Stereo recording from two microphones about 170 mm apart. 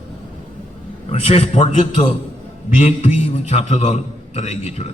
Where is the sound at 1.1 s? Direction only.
35° left (ahead or behind).